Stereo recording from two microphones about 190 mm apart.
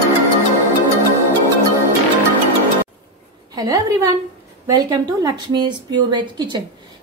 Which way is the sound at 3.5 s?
20° right (ahead or behind).